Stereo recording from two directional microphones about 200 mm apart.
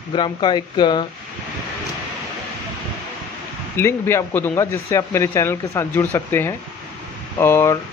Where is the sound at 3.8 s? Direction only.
15° left (ahead or behind).